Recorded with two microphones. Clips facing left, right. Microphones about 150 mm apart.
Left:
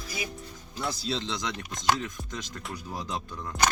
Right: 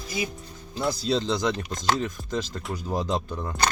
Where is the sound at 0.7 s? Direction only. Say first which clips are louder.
Right 7 dB; 35° right (ahead or behind).